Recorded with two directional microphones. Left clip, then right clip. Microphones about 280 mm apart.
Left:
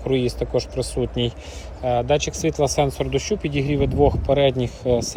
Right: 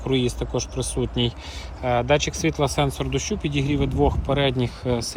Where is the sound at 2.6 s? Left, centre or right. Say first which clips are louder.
Left 5 dB; centre.